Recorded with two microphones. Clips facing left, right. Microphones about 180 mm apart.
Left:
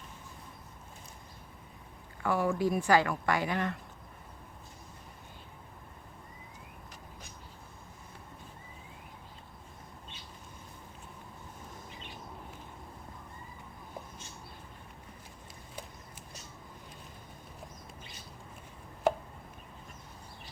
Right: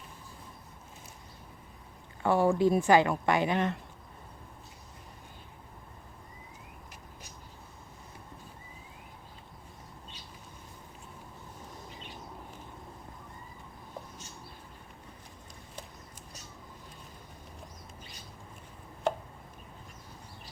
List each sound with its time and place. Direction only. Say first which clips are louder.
2.2 s speech: right 5 dB; 30° right (ahead or behind)